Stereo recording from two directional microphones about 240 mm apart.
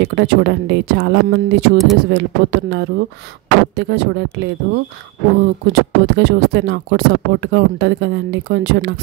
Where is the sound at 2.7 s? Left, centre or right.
Right.